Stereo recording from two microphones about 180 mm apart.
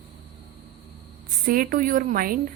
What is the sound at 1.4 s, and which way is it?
Speech, 55° right (ahead or behind).